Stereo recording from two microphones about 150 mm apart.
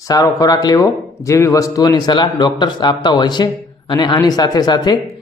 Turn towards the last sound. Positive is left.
turn(degrees=25)  # may be behind; listen again after turning